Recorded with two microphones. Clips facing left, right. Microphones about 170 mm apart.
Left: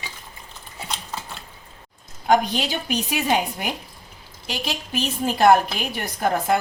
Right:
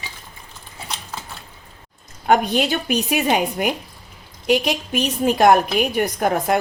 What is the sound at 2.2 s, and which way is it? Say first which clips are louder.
A woman's voice: right 2 dB; 60° right (ahead or behind).